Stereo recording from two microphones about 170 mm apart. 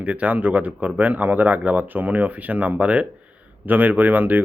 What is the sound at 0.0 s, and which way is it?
Speech, 10° right (ahead or behind).